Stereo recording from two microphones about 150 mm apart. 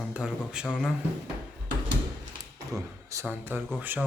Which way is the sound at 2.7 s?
20° right (ahead or behind).